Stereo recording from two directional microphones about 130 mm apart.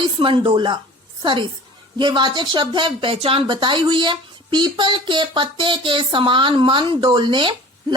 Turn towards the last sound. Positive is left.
turn(degrees=-40)  # may be behind; listen again after turning